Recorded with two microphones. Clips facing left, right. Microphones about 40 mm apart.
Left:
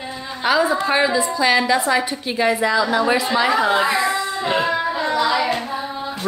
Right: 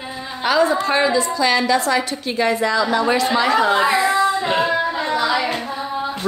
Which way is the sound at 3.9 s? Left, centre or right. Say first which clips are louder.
Right 4 dB; centre.